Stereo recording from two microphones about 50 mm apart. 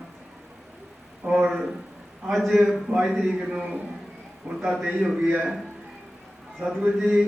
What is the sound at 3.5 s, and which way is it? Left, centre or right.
A man's voice, right.